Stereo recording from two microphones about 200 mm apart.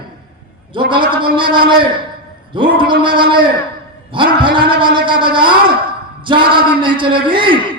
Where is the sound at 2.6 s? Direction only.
25° right (ahead or behind).